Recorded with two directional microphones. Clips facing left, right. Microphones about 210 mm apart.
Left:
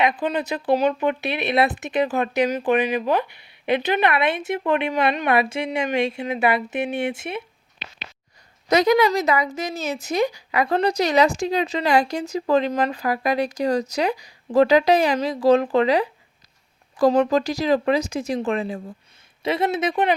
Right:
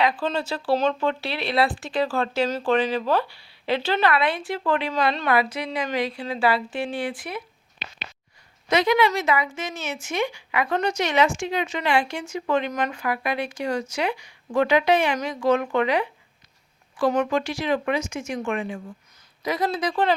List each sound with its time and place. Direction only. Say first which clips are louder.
0.0 s speech: left 2 dB; 20° left (ahead or behind)
8.7 s a woman's voice: left 3 dB; 40° left (ahead or behind); by 20.1 s 20° left (ahead or behind)